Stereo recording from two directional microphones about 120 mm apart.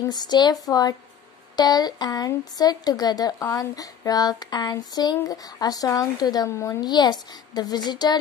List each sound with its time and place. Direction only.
0.1 s speech: 35° left (ahead or behind)